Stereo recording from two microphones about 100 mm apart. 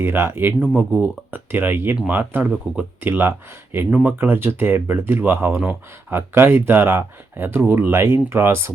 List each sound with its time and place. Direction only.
0.0 s speech: 25° right (ahead or behind)